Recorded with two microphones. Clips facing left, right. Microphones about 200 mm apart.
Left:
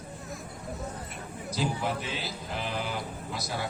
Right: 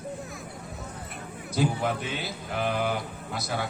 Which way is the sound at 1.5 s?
55° right (ahead or behind).